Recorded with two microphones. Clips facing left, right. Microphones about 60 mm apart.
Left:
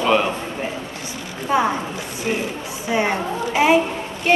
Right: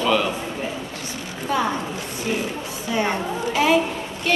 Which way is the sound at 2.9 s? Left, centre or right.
Left.